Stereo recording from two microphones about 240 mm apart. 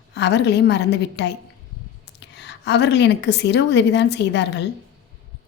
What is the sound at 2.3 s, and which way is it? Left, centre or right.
A woman's voice, left.